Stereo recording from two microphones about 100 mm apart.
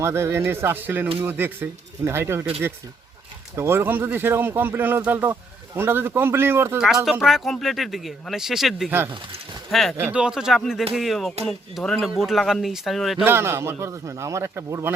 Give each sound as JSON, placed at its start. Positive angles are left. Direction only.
{"t": 0.0, "sound": "speech", "side_deg": -25}
{"t": 3.5, "sound": "speech", "side_deg": -25}
{"t": 6.7, "sound": "speech", "side_deg": -5}
{"t": 10.0, "sound": "speech", "side_deg": -10}
{"t": 13.2, "sound": "speech", "side_deg": -25}